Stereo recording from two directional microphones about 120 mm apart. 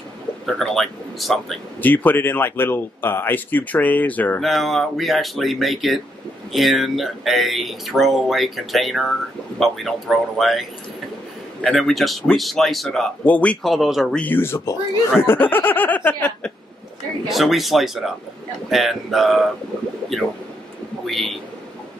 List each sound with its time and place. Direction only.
0.5 s speech: centre (ahead or behind)
1.8 s speech: 15° left (ahead or behind)
4.4 s speech: centre (ahead or behind)
14.2 s speech: 20° left (ahead or behind)
17.3 s a man's voice: centre (ahead or behind)